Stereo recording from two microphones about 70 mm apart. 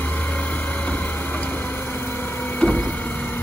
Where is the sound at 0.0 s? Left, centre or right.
Left.